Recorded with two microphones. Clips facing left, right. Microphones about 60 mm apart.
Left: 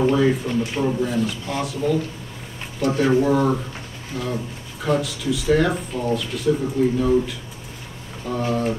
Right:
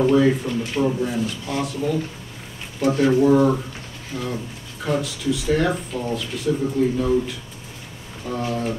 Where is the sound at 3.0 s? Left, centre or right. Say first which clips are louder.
Right 2 dB; centre.